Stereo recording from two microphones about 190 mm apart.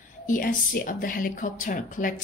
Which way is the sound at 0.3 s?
45° left (ahead or behind).